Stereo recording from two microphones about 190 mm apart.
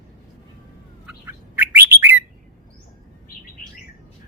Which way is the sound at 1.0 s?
10° right (ahead or behind).